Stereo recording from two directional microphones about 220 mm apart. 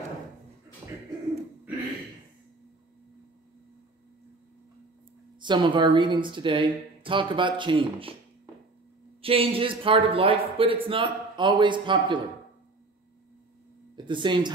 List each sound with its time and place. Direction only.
5.4 s a man's voice: 20° right (ahead or behind)
9.2 s a man's voice: 25° right (ahead or behind)
13.9 s a man's voice: 20° right (ahead or behind)